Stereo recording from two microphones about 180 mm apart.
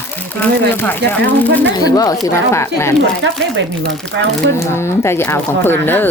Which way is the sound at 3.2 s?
85° right.